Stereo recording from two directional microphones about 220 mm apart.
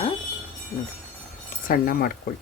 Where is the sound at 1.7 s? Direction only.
40° left (ahead or behind).